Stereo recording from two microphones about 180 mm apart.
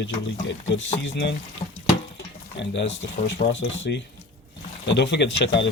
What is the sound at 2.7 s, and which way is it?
Speech, 85° left.